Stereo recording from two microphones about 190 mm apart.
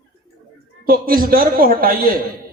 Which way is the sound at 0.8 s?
50° right (ahead or behind).